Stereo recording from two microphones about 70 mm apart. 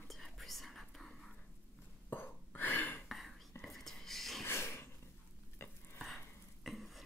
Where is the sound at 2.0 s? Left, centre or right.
Left.